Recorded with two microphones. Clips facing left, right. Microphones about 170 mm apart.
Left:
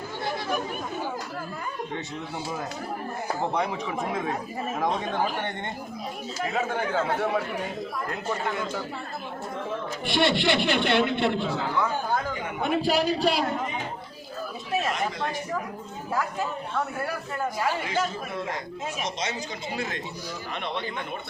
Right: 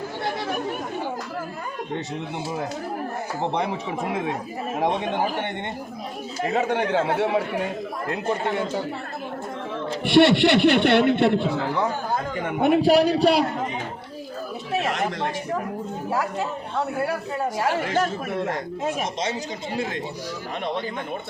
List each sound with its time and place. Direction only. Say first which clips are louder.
3.4 s a man's voice: right 3 dB; 25° right (ahead or behind)
6.4 s speech: right 5 dB; 35° right (ahead or behind)
6.7 s speech: right 5 dB; 75° right (ahead or behind)
6.9 s a man's voice: right 3 dB; 30° right (ahead or behind)
10.0 s speech: right 9 dB; 65° right (ahead or behind)
12.5 s speech: right 8 dB; 60° right (ahead or behind)
14.8 s a sound: right 3 dB; 70° right (ahead or behind)
16.0 s a man's voice: right 2 dB; 30° right (ahead or behind)
17.8 s speech: right 5 dB; 60° right (ahead or behind)
19.2 s speech: right 4 dB; 30° right (ahead or behind)